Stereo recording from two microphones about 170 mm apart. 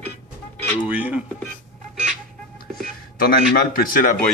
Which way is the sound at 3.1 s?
60° left (ahead or behind).